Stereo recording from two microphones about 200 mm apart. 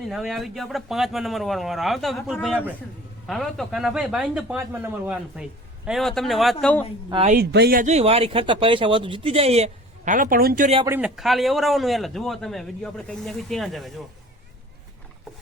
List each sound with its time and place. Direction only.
0.1 s speech: centre (ahead or behind)
7.1 s speech: 30° right (ahead or behind)
7.3 s speech: 50° right (ahead or behind)
10.8 s speech: 5° right (ahead or behind)